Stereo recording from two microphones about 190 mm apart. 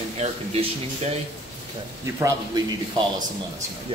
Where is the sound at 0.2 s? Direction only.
35° right (ahead or behind).